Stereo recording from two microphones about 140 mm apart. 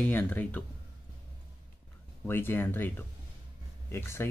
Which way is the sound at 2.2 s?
15° left (ahead or behind).